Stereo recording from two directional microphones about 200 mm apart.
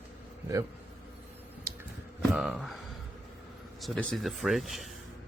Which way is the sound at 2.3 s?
Centre (ahead or behind).